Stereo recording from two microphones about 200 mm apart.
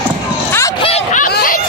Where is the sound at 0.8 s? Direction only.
30° left (ahead or behind).